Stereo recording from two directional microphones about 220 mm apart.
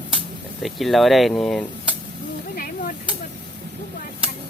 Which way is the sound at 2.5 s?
40° left (ahead or behind).